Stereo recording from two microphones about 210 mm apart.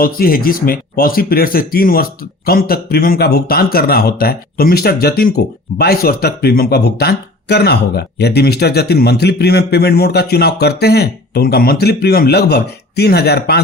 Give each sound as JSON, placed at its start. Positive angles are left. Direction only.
{"t": 0.0, "sound": "speech", "side_deg": 45}